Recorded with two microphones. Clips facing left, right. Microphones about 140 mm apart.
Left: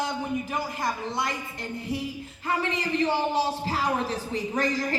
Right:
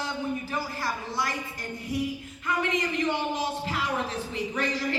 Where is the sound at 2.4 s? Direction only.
35° left (ahead or behind).